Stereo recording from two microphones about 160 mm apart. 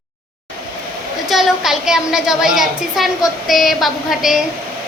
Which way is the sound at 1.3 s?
Centre (ahead or behind).